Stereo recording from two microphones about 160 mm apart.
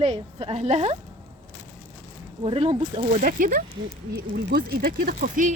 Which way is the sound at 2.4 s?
35° right (ahead or behind).